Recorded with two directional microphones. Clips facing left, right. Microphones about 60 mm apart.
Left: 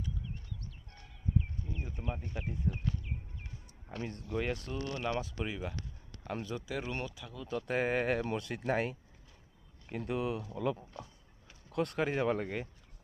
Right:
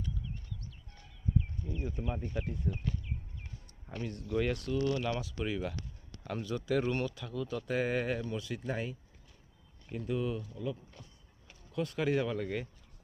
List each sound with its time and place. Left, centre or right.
1.4 s a sound: centre
1.8 s speech: centre
4.0 s speech: left
4.8 s speech: centre
6.7 s speech: centre
7.4 s speech: left
8.2 s speech: left
10.4 s speech: left
11.7 s speech: left
11.9 s speech: left